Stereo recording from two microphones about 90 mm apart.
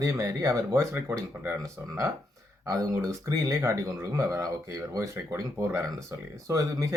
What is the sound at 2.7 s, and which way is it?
A man's voice, 40° right (ahead or behind).